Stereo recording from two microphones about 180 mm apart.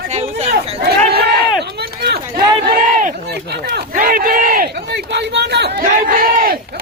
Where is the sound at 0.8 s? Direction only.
65° right (ahead or behind).